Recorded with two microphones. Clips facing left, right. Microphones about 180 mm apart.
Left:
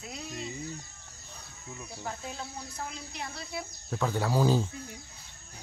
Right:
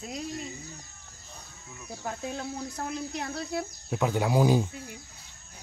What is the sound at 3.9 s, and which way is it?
Speech, 15° right (ahead or behind).